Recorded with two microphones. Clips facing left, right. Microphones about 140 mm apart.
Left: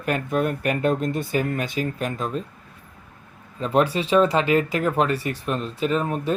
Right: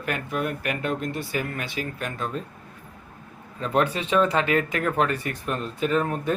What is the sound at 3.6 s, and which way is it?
Speech, 30° left (ahead or behind).